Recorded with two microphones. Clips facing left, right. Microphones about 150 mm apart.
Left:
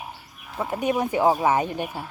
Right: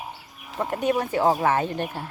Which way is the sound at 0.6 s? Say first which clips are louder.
Even; 10° left (ahead or behind).